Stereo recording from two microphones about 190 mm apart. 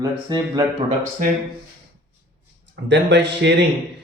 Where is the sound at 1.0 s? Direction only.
45° right (ahead or behind).